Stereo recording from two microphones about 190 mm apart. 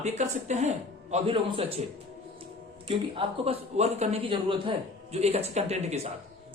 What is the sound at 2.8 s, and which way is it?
A man's voice, 30° right (ahead or behind).